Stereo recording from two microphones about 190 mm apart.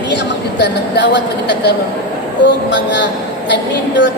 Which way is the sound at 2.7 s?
65° left (ahead or behind).